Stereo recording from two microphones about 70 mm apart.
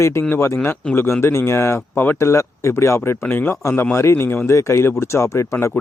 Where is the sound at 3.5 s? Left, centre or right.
Left.